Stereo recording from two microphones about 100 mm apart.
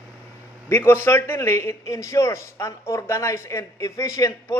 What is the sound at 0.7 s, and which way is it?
A man's voice, 25° left (ahead or behind).